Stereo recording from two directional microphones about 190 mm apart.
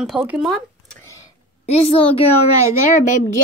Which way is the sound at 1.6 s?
30° left (ahead or behind).